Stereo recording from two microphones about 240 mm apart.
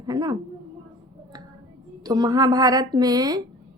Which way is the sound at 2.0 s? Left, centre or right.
Centre.